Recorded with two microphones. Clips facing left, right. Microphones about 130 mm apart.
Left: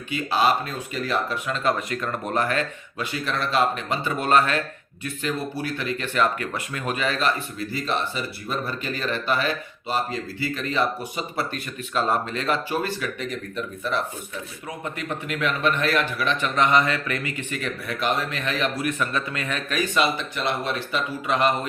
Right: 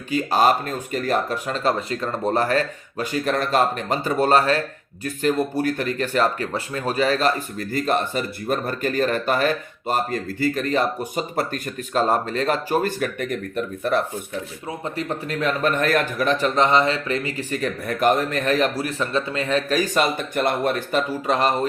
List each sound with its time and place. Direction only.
0.1 s a man's voice: 45° right (ahead or behind)
5.0 s speech: 45° right (ahead or behind)
14.7 s a man's voice: 35° right (ahead or behind)